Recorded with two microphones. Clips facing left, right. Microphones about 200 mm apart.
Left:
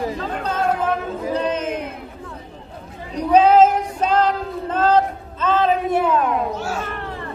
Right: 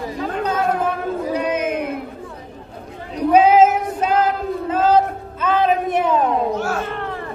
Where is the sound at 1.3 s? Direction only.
10° right (ahead or behind).